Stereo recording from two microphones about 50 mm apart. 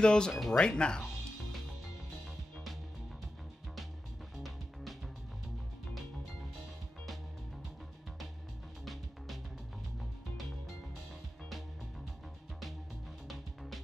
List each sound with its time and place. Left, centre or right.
0.0 s speech: centre
0.3 s speech: centre
0.6 s speech: centre